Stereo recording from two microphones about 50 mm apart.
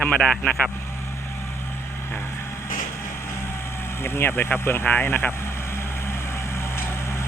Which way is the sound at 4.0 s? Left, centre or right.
Left.